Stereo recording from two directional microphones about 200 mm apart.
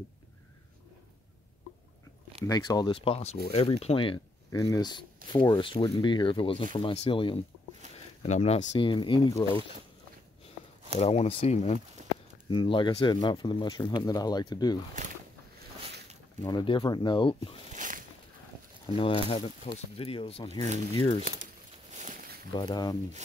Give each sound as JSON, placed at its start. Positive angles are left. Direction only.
{"t": 2.4, "sound": "speech", "side_deg": 20}
{"t": 11.0, "sound": "speech", "side_deg": 30}
{"t": 12.4, "sound": "speech", "side_deg": 25}
{"t": 16.4, "sound": "speech", "side_deg": 25}
{"t": 17.7, "sound": "a sound", "side_deg": -40}
{"t": 18.9, "sound": "speech", "side_deg": 25}
{"t": 22.5, "sound": "speech", "side_deg": 20}